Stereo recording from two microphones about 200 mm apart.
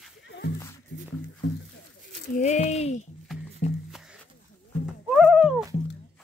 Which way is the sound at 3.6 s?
35° left (ahead or behind).